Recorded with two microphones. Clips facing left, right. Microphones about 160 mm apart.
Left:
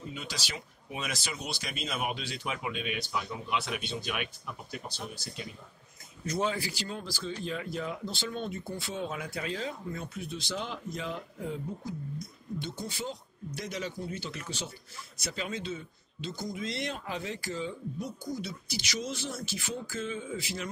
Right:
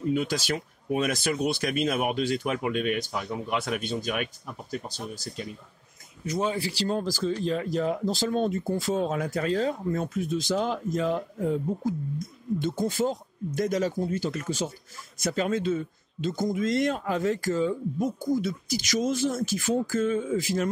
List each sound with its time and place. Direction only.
0.1 s speech: 50° right (ahead or behind)
6.2 s speech: 15° right (ahead or behind)
6.5 s speech: 30° right (ahead or behind); by 20.7 s 45° right (ahead or behind)